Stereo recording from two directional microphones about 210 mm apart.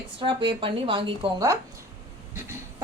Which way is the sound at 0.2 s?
25° right (ahead or behind).